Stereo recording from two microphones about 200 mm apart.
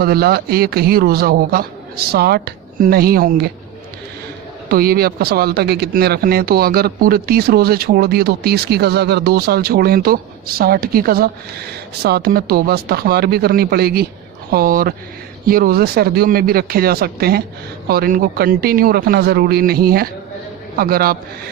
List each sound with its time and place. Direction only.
0.0 s speech: 50° right (ahead or behind)
4.7 s speech: 50° right (ahead or behind)